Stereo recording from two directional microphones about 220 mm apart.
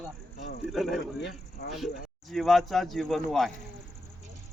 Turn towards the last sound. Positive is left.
turn(degrees=0)  # may be behind; listen again after turning